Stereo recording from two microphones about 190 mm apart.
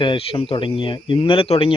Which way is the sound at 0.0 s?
25° left (ahead or behind).